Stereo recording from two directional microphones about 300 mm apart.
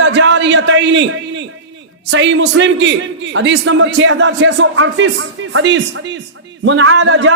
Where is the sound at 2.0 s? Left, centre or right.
Right.